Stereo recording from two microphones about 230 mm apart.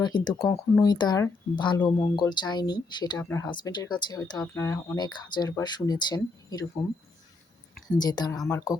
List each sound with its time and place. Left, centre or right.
0.0 s speech: centre
7.9 s speech: centre